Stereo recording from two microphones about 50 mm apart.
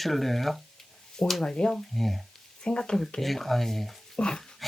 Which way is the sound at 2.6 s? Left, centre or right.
Centre.